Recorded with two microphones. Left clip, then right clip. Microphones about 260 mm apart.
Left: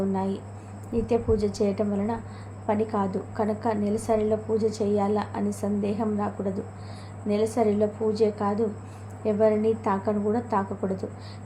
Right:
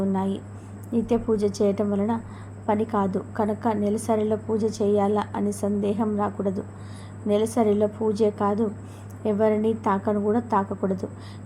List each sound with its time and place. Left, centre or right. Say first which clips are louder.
0.1 s a woman's voice: right 1 dB; centre